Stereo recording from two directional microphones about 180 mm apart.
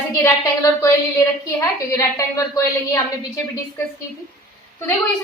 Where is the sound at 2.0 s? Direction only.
20° left (ahead or behind).